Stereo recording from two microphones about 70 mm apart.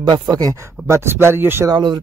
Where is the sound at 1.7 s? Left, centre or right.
Right.